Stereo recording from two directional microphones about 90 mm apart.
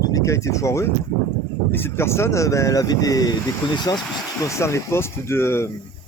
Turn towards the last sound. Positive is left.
turn(degrees=25)  # may be behind; listen again after turning